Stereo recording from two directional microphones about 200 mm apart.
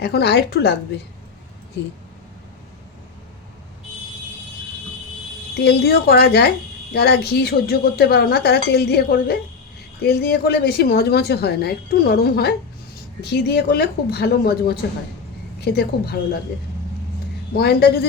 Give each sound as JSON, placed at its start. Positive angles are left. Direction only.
{"t": 0.0, "sound": "a woman's voice", "side_deg": 55}
{"t": 5.5, "sound": "a woman's voice", "side_deg": 55}
{"t": 17.5, "sound": "a woman's voice", "side_deg": 55}